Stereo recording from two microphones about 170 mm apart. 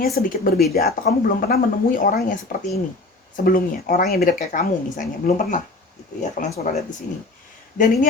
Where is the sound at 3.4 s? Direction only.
60° left (ahead or behind).